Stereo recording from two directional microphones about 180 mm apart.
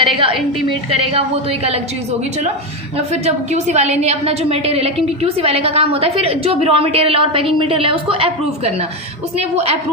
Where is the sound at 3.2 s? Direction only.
40° right (ahead or behind).